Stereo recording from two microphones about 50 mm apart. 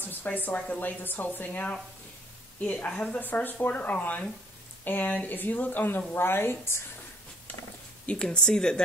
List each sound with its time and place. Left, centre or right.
0.0 s speech: left
8.1 s speech: centre